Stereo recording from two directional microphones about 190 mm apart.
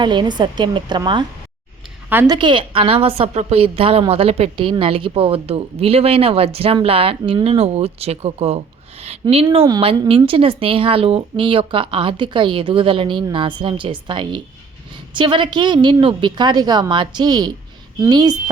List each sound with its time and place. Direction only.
0.0 s a woman's voice: 25° right (ahead or behind)
2.0 s a woman's voice: 10° right (ahead or behind)
2.3 s a woman's voice: 25° right (ahead or behind)